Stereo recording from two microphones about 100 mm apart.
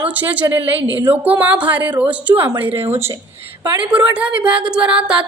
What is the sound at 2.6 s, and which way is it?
Speech, 25° right (ahead or behind).